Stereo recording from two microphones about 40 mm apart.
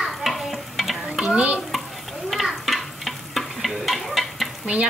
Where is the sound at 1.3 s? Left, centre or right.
Right.